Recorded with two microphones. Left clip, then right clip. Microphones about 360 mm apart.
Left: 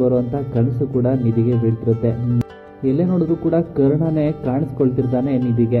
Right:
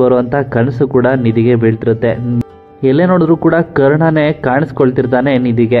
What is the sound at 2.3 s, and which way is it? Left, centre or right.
Music, centre.